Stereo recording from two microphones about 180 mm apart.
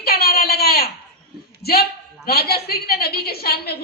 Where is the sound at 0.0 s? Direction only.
60° left (ahead or behind).